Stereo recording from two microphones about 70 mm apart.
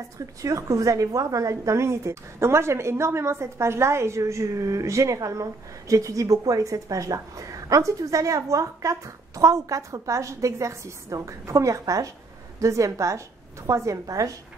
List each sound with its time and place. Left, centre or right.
0.4 s a woman's voice: right